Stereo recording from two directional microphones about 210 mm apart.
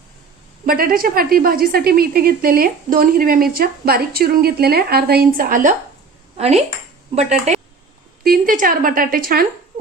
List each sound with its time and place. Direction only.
0.6 s a woman's voice: 45° right (ahead or behind)
6.3 s speech: 30° right (ahead or behind)
8.2 s a woman's voice: 45° right (ahead or behind)